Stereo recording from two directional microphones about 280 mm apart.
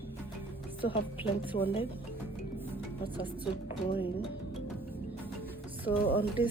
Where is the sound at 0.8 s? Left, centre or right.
Centre.